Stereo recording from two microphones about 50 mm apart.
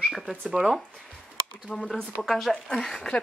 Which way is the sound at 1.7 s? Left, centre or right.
Centre.